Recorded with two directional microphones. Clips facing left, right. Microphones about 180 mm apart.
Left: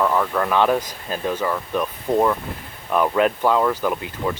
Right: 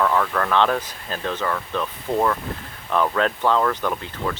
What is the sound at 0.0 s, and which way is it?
Speech, 10° left (ahead or behind).